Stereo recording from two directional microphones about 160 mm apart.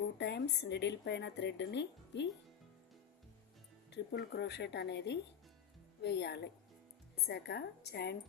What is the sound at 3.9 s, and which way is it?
A woman's voice, 90° left.